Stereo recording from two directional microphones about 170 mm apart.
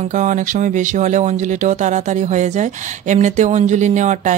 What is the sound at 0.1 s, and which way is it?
Speech, 45° right (ahead or behind).